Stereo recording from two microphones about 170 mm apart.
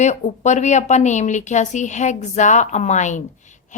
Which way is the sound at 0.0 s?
45° left (ahead or behind).